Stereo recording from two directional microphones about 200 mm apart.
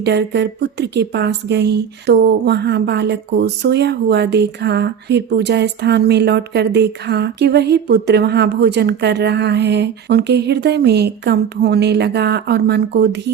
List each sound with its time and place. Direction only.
0.0 s a woman's voice: 60° right (ahead or behind)